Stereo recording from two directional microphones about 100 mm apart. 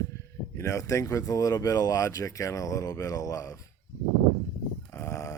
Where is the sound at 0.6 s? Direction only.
30° left (ahead or behind).